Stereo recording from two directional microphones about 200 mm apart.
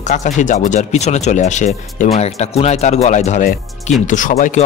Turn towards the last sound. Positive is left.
turn(degrees=35)  # may be behind; listen again after turning